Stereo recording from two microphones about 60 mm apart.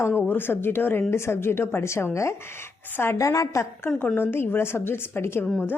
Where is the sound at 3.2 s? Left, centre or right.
Left.